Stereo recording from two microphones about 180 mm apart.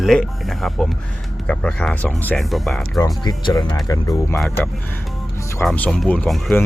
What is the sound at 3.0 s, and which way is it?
Speech, 20° left (ahead or behind).